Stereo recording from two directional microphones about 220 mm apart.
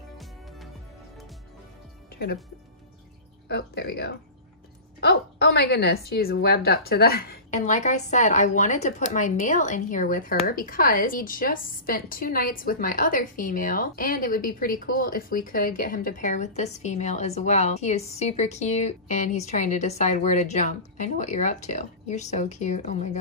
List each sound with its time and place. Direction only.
0.2 s music: centre (ahead or behind)
3.4 s speech: 50° left (ahead or behind)
5.0 s a sound: 50° left (ahead or behind)
6.0 s a woman's voice: 45° left (ahead or behind)